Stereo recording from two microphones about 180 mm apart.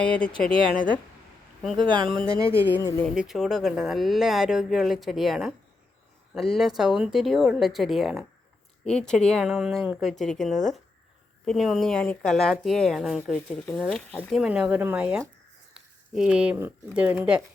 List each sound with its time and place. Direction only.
0.0 s speech: 5° left (ahead or behind)
2.7 s speech: 20° left (ahead or behind)
3.2 s speech: centre (ahead or behind)